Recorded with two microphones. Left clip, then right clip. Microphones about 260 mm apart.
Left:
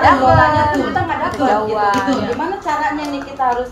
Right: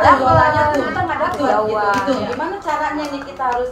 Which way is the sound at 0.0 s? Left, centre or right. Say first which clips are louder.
Left 1 dB; left.